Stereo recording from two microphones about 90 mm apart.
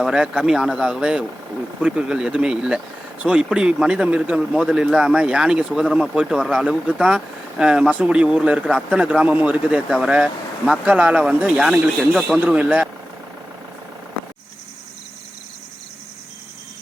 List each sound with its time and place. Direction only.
0.0 s a man's voice: 10° right (ahead or behind)
12.4 s a man's voice: 15° right (ahead or behind)